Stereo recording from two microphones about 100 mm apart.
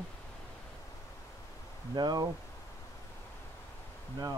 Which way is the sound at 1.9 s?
45° right (ahead or behind).